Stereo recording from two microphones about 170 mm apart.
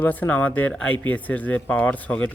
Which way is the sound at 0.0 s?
10° left (ahead or behind).